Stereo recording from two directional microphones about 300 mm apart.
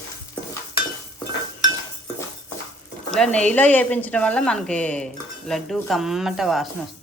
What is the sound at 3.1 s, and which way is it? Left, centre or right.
A woman's voice, centre.